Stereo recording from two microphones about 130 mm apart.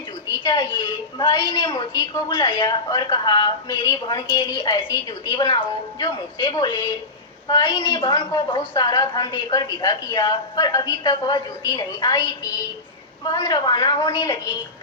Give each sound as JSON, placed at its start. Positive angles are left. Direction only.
{"t": 0.4, "sound": "a woman's voice", "side_deg": 35}
{"t": 1.7, "sound": "a woman's voice", "side_deg": 25}
{"t": 8.4, "sound": "a woman's voice", "side_deg": 40}